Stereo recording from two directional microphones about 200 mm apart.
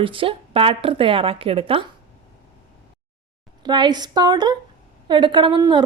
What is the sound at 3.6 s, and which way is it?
A woman's voice, 20° right (ahead or behind).